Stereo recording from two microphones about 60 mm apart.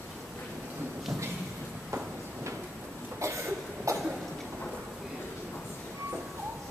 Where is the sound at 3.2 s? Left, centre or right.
Right.